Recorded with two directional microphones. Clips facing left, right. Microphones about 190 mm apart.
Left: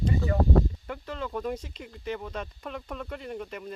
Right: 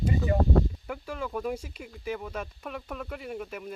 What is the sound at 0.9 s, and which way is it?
Speech, 10° right (ahead or behind).